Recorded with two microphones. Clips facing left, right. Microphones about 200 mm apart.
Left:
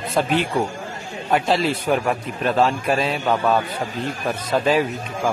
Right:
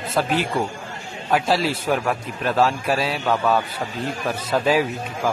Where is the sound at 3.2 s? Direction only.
15° left (ahead or behind).